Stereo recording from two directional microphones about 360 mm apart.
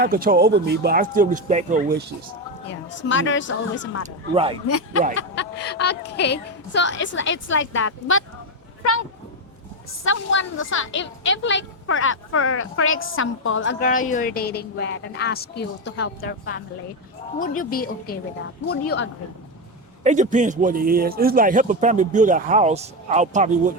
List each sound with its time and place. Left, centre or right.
0.0 s speech: right
2.6 s a woman's voice: left
4.0 s speech: centre
5.3 s a woman's voice: left
10.0 s a woman's voice: left
20.1 s speech: centre